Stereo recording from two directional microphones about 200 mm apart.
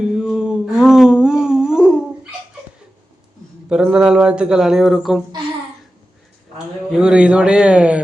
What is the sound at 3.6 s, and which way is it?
Speech, 5° right (ahead or behind).